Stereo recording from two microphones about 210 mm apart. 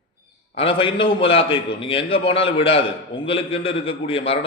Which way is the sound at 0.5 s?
25° left (ahead or behind).